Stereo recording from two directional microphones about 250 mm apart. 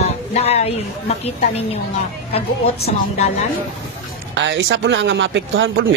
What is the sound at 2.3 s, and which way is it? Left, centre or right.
Speech, left.